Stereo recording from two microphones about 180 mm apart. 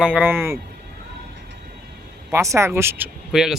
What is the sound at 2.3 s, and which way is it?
Speech, 15° right (ahead or behind).